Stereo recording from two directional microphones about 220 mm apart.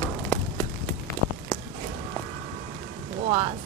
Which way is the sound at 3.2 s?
25° right (ahead or behind).